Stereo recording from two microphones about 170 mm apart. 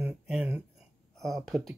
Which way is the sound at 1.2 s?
Centre (ahead or behind).